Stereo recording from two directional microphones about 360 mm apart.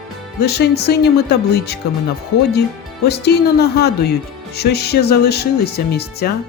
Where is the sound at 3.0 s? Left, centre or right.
Left.